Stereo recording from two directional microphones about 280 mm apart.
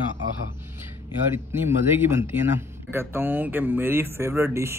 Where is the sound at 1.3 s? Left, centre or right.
Centre.